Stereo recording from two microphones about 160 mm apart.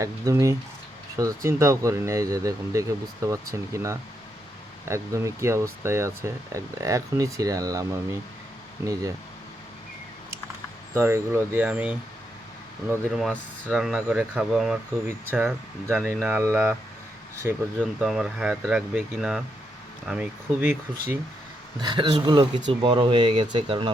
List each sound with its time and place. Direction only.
0.0 s speech: 20° right (ahead or behind)
10.9 s speech: 15° right (ahead or behind)
13.1 s speech: centre (ahead or behind)
15.0 s speech: 15° right (ahead or behind)
21.8 s speech: 25° right (ahead or behind)